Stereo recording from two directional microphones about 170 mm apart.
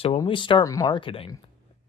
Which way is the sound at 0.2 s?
30° left (ahead or behind).